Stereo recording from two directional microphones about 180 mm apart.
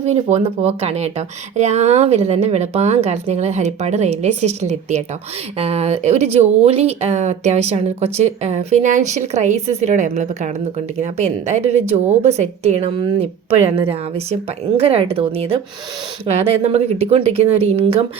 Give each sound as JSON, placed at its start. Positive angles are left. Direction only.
{"t": 0.0, "sound": "speech", "side_deg": -35}